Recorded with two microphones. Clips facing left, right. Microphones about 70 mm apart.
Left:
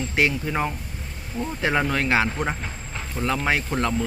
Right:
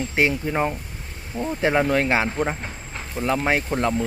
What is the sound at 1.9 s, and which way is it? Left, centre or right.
Speech, right.